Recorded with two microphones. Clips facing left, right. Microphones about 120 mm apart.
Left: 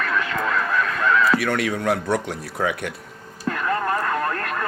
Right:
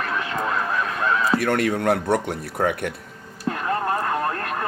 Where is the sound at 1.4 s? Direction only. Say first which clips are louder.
Right 2 dB; 50° right (ahead or behind).